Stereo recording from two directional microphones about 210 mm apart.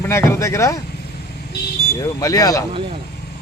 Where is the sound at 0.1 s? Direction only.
15° left (ahead or behind).